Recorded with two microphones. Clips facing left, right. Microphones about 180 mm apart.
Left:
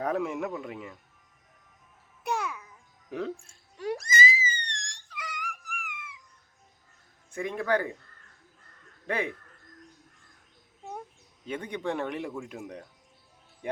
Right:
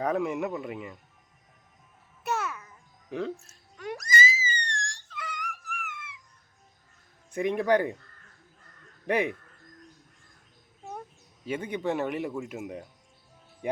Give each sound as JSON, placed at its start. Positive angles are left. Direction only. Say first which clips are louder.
{"t": 0.0, "sound": "a man's voice", "louder": "right 2 dB", "side_deg": 0}
{"t": 2.2, "sound": "babbling", "louder": "even", "side_deg": 15}
{"t": 3.1, "sound": "a man's voice", "louder": "right 1 dB", "side_deg": 5}
{"t": 3.4, "sound": "a sound", "louder": "left 4 dB", "side_deg": 30}
{"t": 7.3, "sound": "speech", "louder": "right 4 dB", "side_deg": -20}
{"t": 9.0, "sound": "speech", "louder": "right 4 dB", "side_deg": -15}
{"t": 11.4, "sound": "a man's voice", "louder": "right 3 dB", "side_deg": -5}